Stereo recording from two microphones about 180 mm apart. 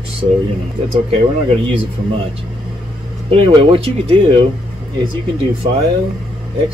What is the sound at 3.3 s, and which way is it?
Speech, 35° right (ahead or behind).